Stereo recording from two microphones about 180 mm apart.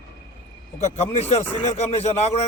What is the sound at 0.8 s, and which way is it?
A man's voice, 35° left (ahead or behind).